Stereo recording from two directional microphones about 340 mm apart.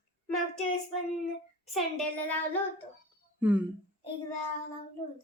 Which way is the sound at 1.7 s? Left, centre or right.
Centre.